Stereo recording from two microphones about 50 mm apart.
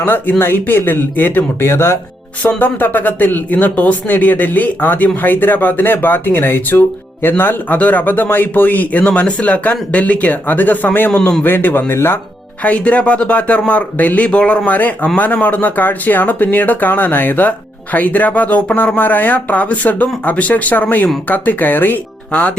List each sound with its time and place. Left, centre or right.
0.0 s speech: left
1.6 s speech: left
2.4 s speech: left
11.1 s speech: left
11.4 s speech: left
12.6 s speech: left
14.3 s speech: left
18.9 s speech: left
22.3 s speech: left